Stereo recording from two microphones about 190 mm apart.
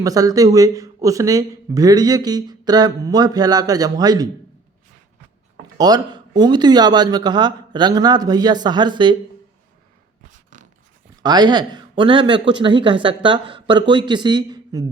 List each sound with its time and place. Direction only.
0.0 s speech: 20° right (ahead or behind)
5.7 s speech: 20° right (ahead or behind)
10.5 s a sound: 40° right (ahead or behind)
11.2 s speech: 20° right (ahead or behind)